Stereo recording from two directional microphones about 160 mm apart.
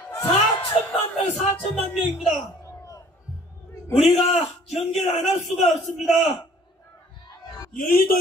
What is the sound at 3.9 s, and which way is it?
Speech, 40° left (ahead or behind).